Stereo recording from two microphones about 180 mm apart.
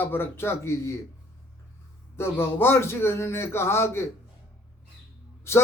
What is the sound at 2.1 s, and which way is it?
A man's voice, 15° left (ahead or behind).